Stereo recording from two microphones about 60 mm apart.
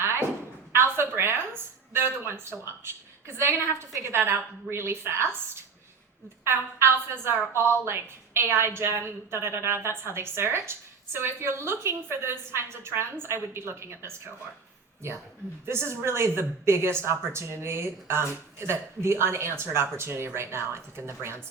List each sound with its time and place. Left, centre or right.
0.7 s a sound: right
1.9 s speech: right
6.4 s speech: right
15.6 s speech: right